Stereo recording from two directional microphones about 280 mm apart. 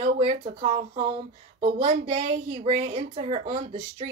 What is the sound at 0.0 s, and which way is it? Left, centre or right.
Female singing, right.